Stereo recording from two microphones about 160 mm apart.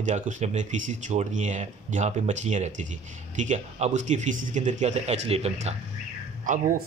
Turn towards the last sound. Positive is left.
turn(degrees=-55)  # may be behind; listen again after turning